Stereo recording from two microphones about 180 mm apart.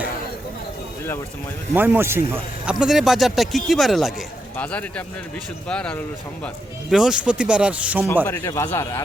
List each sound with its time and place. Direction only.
1.7 s speech: 10° right (ahead or behind)
8.0 s speech: 10° left (ahead or behind)